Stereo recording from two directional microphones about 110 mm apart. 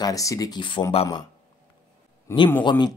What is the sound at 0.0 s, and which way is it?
Speech, 30° left (ahead or behind).